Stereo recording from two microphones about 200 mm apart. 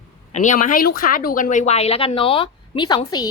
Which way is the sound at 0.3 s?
40° left (ahead or behind).